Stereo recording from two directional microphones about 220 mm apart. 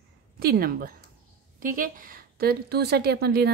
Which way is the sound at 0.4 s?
45° right (ahead or behind).